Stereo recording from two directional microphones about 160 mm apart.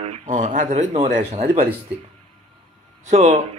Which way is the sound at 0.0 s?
45° right (ahead or behind).